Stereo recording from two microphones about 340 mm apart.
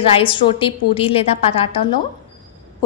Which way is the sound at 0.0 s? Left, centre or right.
Centre.